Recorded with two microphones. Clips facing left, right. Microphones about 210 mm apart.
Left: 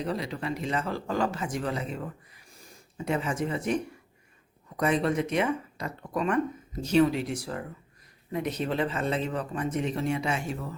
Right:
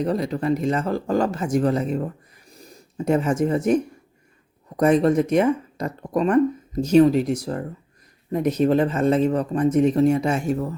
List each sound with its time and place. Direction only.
0.0 s speech: 45° right (ahead or behind)
4.8 s speech: 45° right (ahead or behind)